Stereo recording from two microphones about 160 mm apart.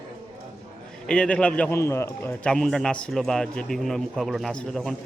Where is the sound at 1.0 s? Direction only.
5° left (ahead or behind).